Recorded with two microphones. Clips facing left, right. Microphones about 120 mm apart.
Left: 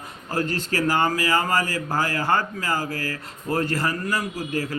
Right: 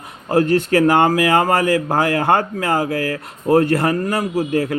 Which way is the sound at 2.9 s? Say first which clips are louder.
Right 9 dB; 40° left (ahead or behind).